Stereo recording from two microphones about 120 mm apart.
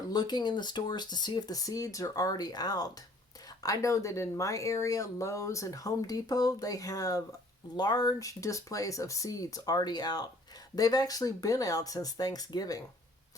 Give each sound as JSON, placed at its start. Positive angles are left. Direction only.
{"t": 0.1, "sound": "speech", "side_deg": 35}